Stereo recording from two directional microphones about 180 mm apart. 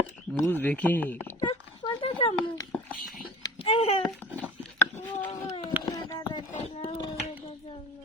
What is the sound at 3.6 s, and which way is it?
Speech, 30° left (ahead or behind).